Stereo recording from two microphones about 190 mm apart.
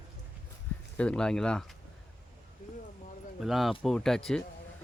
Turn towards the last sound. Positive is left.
turn(degrees=5)  # may be behind; listen again after turning